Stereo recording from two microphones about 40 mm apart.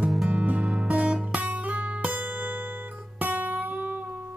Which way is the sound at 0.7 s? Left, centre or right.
Right.